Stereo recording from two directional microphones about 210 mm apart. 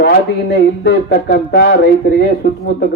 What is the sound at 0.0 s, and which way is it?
Speech, 50° left (ahead or behind).